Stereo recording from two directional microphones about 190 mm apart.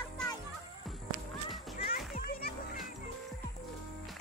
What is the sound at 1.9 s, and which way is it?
Children playing, 50° left (ahead or behind).